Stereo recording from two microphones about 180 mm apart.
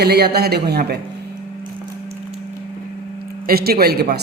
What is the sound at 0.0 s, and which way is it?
Speech, 60° right (ahead or behind).